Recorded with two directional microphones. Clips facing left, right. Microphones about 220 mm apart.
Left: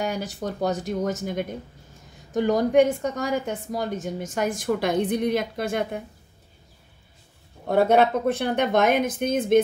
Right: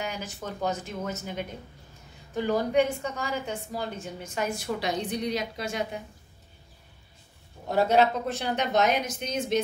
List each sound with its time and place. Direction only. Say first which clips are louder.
0.0 s a woman's voice: left 7 dB; 40° left (ahead or behind)
7.6 s a woman's voice: left 4 dB; 55° left (ahead or behind)